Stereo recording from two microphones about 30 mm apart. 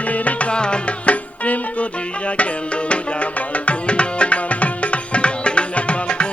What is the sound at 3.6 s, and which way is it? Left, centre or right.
Tabla, left.